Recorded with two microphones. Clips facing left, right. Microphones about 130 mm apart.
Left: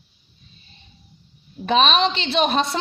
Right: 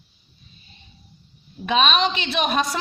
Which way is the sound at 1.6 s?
35° left (ahead or behind).